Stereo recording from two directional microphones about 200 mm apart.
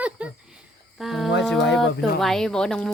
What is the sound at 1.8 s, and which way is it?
Speech, 60° left (ahead or behind).